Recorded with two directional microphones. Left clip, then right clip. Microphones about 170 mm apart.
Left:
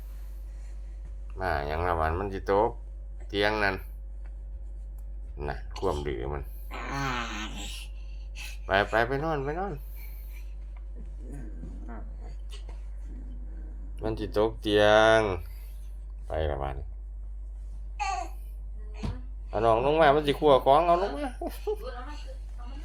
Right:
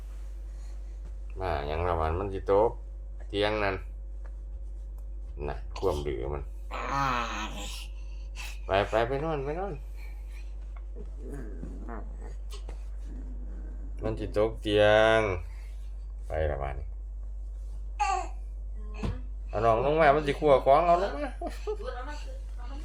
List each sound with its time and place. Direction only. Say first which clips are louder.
1.4 s a sound: left 2 dB; 15° left (ahead or behind)
3.2 s speech: left 2 dB; 15° left (ahead or behind)
5.4 s speech: even; 15° left (ahead or behind)
6.7 s wail: right 4 dB; 15° right (ahead or behind)
8.6 s speech: left 1 dB; 15° left (ahead or behind)
14.0 s speech: left 1 dB; 15° left (ahead or behind)
19.5 s speech: left 1 dB; 10° left (ahead or behind)